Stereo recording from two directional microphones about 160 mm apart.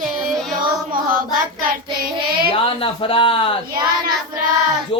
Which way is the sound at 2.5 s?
35° left (ahead or behind).